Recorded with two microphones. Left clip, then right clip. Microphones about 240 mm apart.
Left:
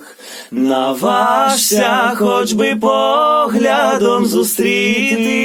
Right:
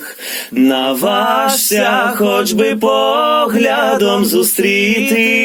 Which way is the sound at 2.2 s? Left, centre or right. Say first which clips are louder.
Right 1 dB; centre.